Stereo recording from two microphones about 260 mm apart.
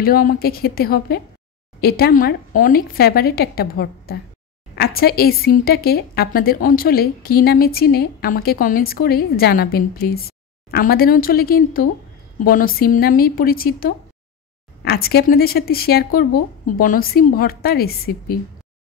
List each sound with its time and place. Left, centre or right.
0.0 s speech: left